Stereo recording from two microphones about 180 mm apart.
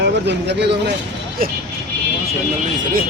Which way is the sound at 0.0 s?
70° right (ahead or behind).